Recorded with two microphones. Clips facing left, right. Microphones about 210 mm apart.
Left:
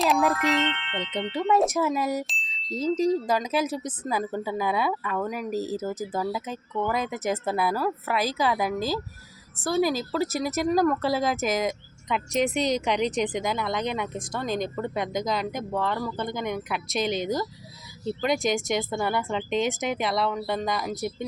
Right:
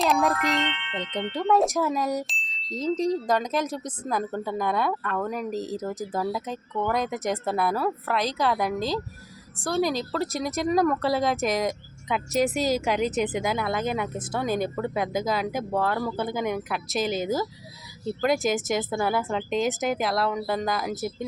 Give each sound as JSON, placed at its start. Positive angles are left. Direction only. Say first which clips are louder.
{"t": 0.0, "sound": "speech", "louder": "even", "side_deg": 0}
{"t": 10.7, "sound": "speech", "louder": "right 1 dB", "side_deg": -5}